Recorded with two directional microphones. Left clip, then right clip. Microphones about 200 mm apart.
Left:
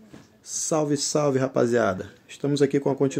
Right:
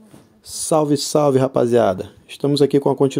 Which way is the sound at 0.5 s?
25° right (ahead or behind).